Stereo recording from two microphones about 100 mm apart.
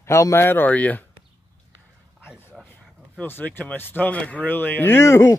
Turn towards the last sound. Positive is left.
turn(degrees=25)  # may be behind; listen again after turning